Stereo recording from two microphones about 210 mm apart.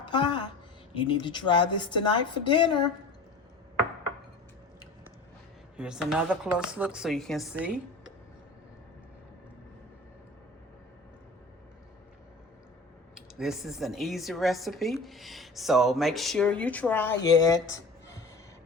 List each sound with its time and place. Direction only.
0.0 s a woman's voice: 20° left (ahead or behind)
5.7 s a woman's voice: 5° right (ahead or behind)
13.1 s a woman's voice: centre (ahead or behind); by 17.7 s 15° left (ahead or behind)